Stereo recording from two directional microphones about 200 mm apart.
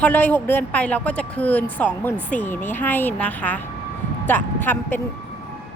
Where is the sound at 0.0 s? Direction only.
10° left (ahead or behind).